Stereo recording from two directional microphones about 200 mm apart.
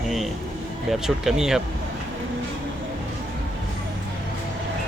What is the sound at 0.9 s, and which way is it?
Speech, centre (ahead or behind).